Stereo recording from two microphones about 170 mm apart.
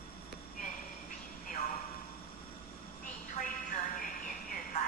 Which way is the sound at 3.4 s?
50° left (ahead or behind).